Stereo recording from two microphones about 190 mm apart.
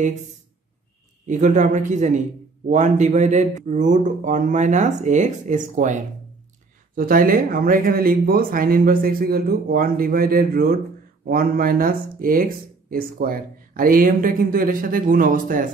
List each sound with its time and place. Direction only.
1.2 s speech: 40° right (ahead or behind)